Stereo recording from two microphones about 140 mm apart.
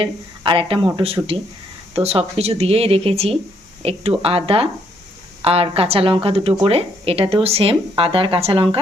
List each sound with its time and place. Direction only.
0.0 s a woman's voice: 40° right (ahead or behind)